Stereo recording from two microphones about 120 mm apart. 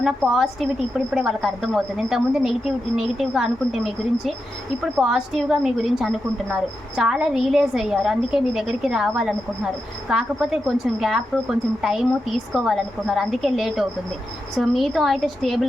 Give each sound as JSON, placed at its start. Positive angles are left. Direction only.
{"t": 0.3, "sound": "a woman's voice", "side_deg": -5}